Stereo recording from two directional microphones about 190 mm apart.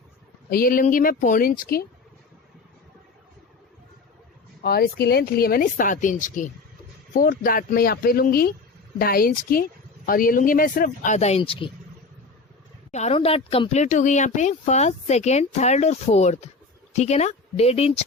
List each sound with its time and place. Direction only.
0.5 s speech: 50° left (ahead or behind)
4.6 s speech: 55° left (ahead or behind); by 11.7 s 30° left (ahead or behind)
12.9 s speech: 35° left (ahead or behind)